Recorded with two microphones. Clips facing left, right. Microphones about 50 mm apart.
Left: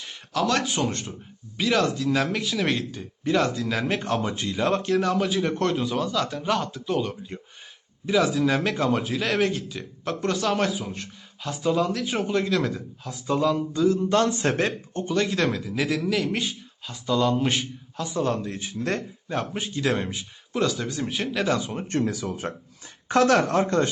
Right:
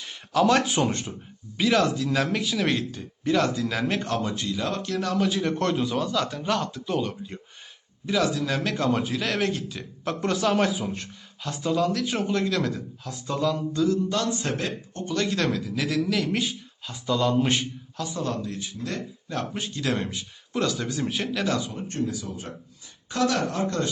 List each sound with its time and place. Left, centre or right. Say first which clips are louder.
0.4 s speech: right 2 dB; centre
4.2 s speech: left 2 dB; left
4.9 s speech: left 2 dB; centre; by 14.7 s left
14.9 s speech: left 1 dB; centre
18.2 s speech: left 5 dB; left
19.3 s speech: left 2 dB; centre
21.8 s speech: left 4 dB; left
23.0 s speech: left 5 dB; left
23.6 s speech: left 4 dB; left